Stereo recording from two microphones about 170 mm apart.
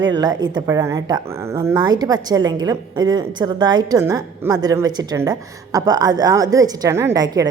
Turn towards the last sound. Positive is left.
turn(degrees=-20)  # may be behind; listen again after turning